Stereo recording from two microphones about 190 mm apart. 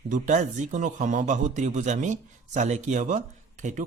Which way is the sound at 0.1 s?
40° right (ahead or behind).